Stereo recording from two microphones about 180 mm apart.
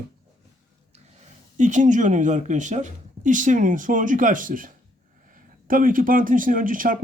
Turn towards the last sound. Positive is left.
turn(degrees=-50)  # may be behind; listen again after turning